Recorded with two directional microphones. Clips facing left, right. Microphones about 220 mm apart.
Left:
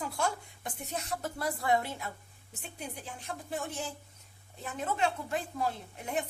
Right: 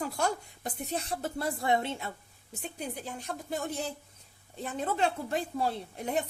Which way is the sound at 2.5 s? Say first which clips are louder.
Right 5 dB; 40° right (ahead or behind).